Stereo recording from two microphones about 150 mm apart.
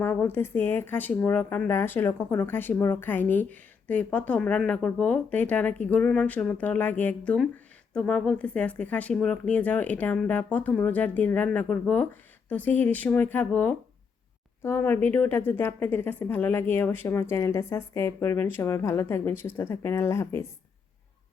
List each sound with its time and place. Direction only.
0.0 s speech: 15° left (ahead or behind)